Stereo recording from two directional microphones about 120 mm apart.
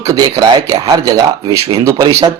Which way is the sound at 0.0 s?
30° right (ahead or behind).